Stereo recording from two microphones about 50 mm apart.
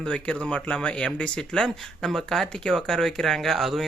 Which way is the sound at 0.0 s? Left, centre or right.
Centre.